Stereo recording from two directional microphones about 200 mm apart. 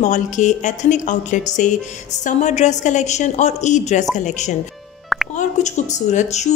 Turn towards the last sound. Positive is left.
turn(degrees=35)  # may be behind; listen again after turning